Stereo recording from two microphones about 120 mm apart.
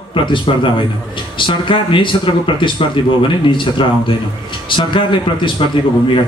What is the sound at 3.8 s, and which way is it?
Speech, 45° left (ahead or behind).